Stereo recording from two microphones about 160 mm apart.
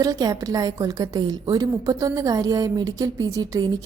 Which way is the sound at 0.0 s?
20° right (ahead or behind).